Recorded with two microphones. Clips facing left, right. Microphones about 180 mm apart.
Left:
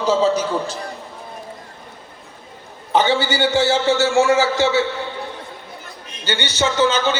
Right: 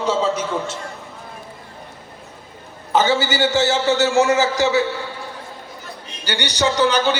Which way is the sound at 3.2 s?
20° right (ahead or behind).